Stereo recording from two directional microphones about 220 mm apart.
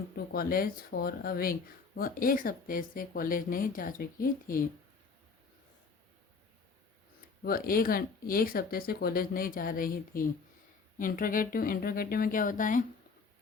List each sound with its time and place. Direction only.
0.3 s speech: 40° left (ahead or behind)
7.4 s speech: 40° left (ahead or behind)